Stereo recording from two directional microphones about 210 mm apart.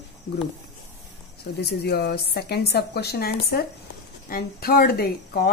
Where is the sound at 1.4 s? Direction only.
50° left (ahead or behind).